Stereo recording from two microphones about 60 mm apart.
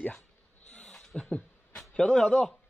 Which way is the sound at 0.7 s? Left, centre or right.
Centre.